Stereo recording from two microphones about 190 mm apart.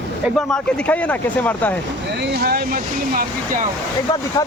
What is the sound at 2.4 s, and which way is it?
Speech, 55° right (ahead or behind).